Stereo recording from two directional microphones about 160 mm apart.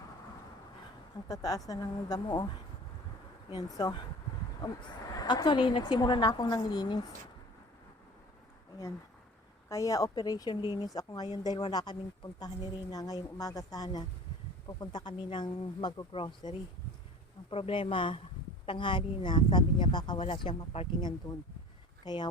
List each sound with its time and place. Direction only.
1.3 s speech: 20° left (ahead or behind)
3.8 s speech: 25° left (ahead or behind)
9.6 s speech: 20° left (ahead or behind)